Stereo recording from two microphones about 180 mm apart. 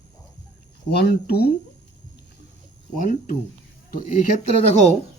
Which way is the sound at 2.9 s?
45° left (ahead or behind).